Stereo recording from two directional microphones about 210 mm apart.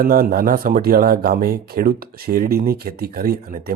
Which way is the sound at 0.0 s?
45° right (ahead or behind).